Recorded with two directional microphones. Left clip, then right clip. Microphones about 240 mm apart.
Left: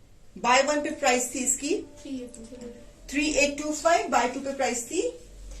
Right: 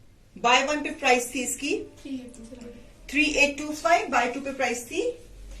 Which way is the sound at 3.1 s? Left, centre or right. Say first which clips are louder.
Right 3 dB; centre.